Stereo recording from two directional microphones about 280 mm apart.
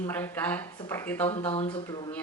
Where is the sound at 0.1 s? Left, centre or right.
Centre.